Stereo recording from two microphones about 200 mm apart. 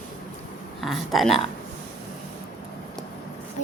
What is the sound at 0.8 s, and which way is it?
Speech, centre (ahead or behind).